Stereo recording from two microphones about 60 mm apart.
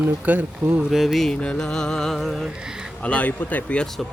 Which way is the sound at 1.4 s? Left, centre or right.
Centre.